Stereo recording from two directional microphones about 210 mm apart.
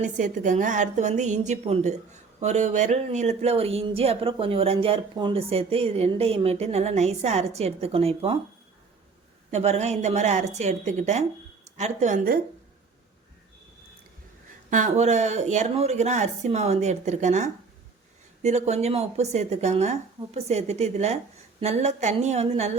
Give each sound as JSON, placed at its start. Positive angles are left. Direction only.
{"t": 0.0, "sound": "a woman's voice", "side_deg": -35}
{"t": 9.5, "sound": "speech", "side_deg": -30}
{"t": 14.7, "sound": "speech", "side_deg": -35}